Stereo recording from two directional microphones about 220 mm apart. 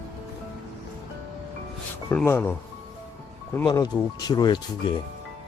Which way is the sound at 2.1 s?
10° left (ahead or behind).